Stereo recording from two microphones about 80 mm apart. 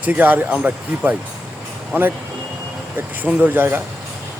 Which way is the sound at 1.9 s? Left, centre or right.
Right.